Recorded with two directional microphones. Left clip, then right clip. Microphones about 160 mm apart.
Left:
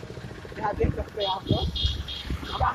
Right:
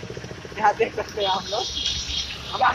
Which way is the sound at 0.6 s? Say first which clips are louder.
Right 10 dB; 40° right (ahead or behind).